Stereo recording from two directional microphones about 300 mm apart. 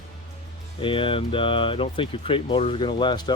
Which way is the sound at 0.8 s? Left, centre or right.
Centre.